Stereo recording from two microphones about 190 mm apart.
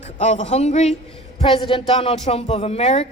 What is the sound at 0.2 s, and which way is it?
A woman's voice, 35° left (ahead or behind).